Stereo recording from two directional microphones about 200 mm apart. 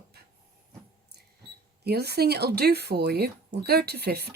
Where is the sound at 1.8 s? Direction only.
50° right (ahead or behind).